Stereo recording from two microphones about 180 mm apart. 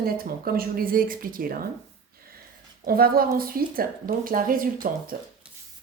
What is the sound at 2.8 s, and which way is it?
Speech, 55° right (ahead or behind).